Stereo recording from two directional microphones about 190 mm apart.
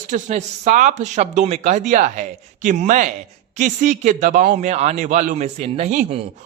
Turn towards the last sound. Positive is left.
turn(degrees=-35)  # may be behind; listen again after turning